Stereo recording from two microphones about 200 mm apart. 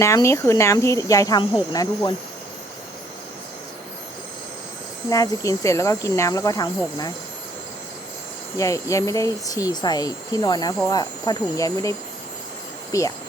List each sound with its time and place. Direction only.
0.0 s speech: 15° left (ahead or behind)
5.0 s speech: 15° left (ahead or behind)
8.5 s speech: 15° left (ahead or behind)